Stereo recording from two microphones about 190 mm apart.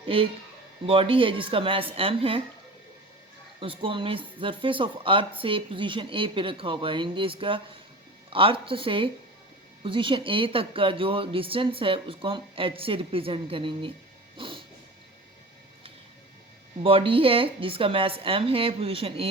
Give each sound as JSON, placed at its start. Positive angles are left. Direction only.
{"t": 0.0, "sound": "speech", "side_deg": -30}
{"t": 3.6, "sound": "speech", "side_deg": -30}
{"t": 14.3, "sound": "a sound", "side_deg": -25}
{"t": 16.8, "sound": "speech", "side_deg": -30}